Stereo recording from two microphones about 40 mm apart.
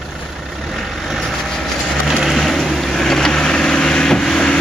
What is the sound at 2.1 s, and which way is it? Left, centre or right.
Vehicle, centre.